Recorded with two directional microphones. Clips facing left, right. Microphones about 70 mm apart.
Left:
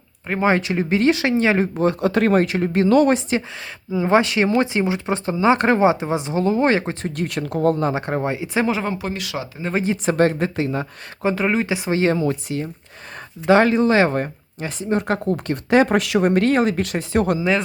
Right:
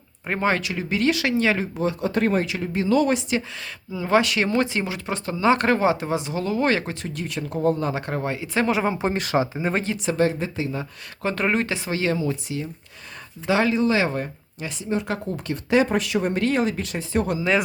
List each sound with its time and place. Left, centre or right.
0.3 s speech: centre
0.6 s speech: left
1.8 s speech: left
2.4 s speech: left
3.2 s speech: left
7.0 s speech: left
7.9 s speech: left
8.6 s speech: centre
9.0 s speech: right
10.1 s speech: left
11.3 s speech: centre
11.9 s speech: left
12.1 s speech: left
15.9 s speech: left